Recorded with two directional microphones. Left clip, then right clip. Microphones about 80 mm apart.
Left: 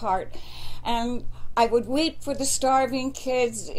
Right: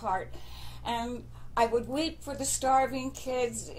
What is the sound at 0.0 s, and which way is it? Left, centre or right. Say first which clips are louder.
A woman's voice: left 6 dB; left.